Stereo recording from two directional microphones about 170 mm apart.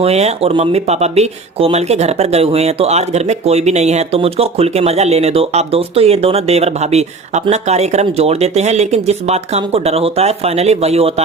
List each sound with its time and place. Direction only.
0.0 s speech: 40° right (ahead or behind)